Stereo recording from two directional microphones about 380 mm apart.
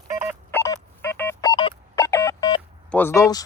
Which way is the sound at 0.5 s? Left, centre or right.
Centre.